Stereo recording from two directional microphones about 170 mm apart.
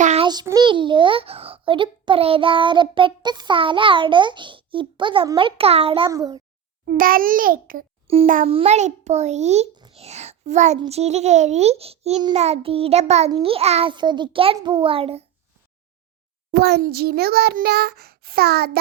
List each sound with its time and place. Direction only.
0.0 s child singing: 40° right (ahead or behind)
0.3 s a child's voice: 25° right (ahead or behind)
6.1 s a child's voice: 20° right (ahead or behind)
6.8 s a child's voice: 55° right (ahead or behind)
8.0 s a child's voice: 35° right (ahead or behind)
9.7 s a sound: 25° right (ahead or behind)
10.0 s a child's voice: 40° right (ahead or behind)
16.5 s a child's voice: 75° right (ahead or behind)